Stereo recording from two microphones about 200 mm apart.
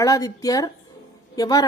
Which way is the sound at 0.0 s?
15° left (ahead or behind).